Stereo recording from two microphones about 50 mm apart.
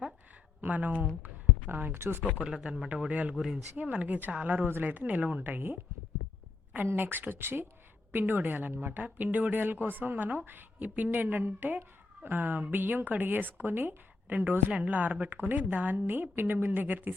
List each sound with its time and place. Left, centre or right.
0.7 s speech: right
1.9 s speech: right
2.4 s speech: centre
3.1 s speech: right
3.3 s speech: centre
3.8 s a woman's voice: right
6.9 s a woman's voice: right
15.3 s speech: right
15.7 s a woman's voice: right